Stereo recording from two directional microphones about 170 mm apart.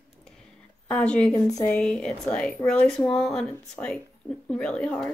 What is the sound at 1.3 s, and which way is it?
Speech, 20° left (ahead or behind).